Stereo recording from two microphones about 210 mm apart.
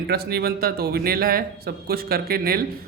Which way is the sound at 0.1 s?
50° right (ahead or behind).